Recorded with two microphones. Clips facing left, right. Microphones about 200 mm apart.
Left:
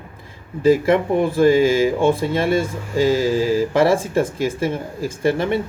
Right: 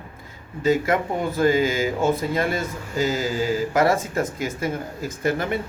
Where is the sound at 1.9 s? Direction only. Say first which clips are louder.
Left 4 dB; 30° left (ahead or behind).